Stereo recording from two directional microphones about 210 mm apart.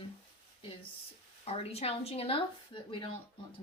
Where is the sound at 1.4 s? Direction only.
30° left (ahead or behind).